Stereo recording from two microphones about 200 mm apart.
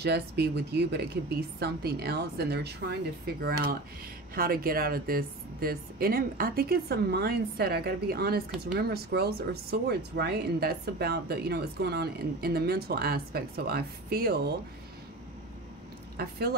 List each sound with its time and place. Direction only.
0.0 s speech: 55° right (ahead or behind)
16.2 s speech: 55° right (ahead or behind)